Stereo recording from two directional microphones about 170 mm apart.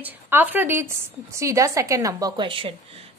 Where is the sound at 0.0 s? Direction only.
10° right (ahead or behind).